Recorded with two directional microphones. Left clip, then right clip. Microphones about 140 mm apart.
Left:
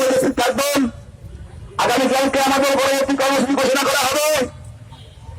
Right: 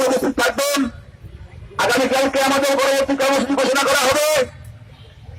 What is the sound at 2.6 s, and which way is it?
A man's voice, 45° left (ahead or behind).